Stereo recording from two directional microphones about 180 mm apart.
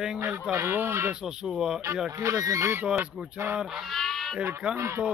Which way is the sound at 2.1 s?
15° right (ahead or behind).